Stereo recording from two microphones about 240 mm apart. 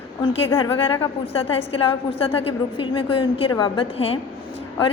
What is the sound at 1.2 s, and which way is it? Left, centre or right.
A woman's voice, left.